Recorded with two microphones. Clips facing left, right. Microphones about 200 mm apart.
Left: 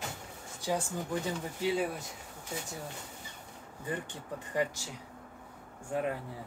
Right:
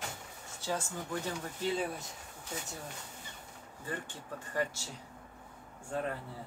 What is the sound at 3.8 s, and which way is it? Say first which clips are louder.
Speech: left 3 dB; 15° left (ahead or behind).